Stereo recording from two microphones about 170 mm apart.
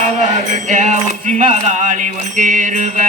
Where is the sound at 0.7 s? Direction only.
45° right (ahead or behind).